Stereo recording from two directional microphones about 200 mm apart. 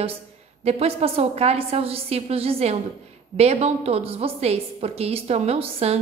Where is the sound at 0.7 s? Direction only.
30° right (ahead or behind).